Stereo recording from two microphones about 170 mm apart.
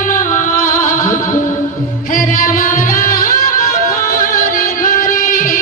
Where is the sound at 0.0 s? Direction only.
50° left (ahead or behind).